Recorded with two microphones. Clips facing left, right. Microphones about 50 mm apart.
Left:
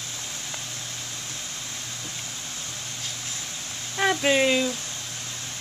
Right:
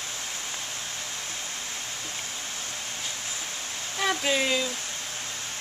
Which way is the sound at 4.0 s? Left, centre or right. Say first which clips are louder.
Left 5 dB; left.